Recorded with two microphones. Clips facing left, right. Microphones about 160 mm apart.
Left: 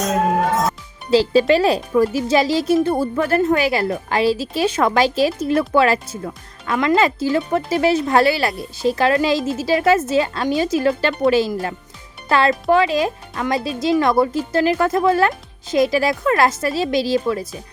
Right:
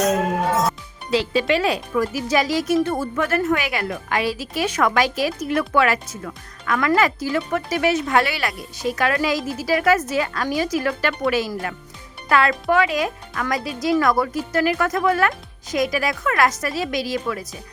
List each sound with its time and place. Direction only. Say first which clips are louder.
1.1 s speech: left 6 dB; 35° left (ahead or behind)